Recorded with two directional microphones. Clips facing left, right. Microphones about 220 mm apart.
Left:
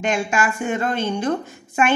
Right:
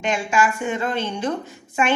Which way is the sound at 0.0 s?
50° left (ahead or behind).